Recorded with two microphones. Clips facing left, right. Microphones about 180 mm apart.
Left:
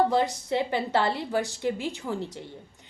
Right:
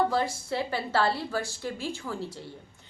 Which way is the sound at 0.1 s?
20° left (ahead or behind).